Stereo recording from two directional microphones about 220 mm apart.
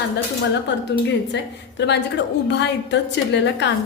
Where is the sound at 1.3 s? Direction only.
50° left (ahead or behind).